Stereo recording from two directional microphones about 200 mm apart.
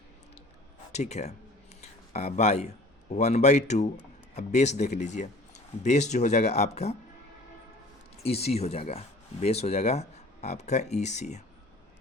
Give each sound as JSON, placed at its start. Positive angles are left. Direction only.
{"t": 0.9, "sound": "speech", "side_deg": 35}
{"t": 1.8, "sound": "a sound", "side_deg": 35}
{"t": 3.1, "sound": "speech", "side_deg": 35}
{"t": 8.2, "sound": "speech", "side_deg": 30}